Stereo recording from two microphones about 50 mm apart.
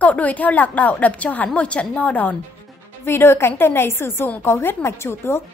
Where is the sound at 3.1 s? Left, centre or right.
Left.